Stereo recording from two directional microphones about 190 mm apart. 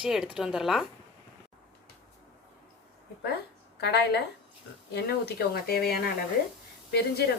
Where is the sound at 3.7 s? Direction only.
60° left (ahead or behind).